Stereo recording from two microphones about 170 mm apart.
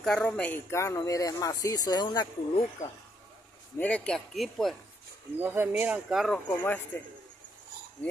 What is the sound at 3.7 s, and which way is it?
Speech, 10° left (ahead or behind).